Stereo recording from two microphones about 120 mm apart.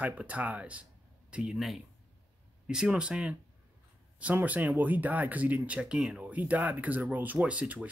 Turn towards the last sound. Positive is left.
turn(degrees=-10)  # may be behind; listen again after turning